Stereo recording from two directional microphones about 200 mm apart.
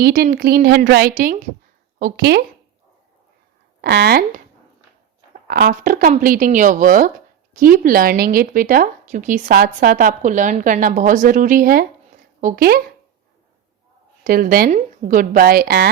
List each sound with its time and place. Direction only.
0.0 s speech: 50° right (ahead or behind)
3.8 s speech: 55° right (ahead or behind)
5.5 s speech: 50° right (ahead or behind)
14.3 s speech: 45° right (ahead or behind)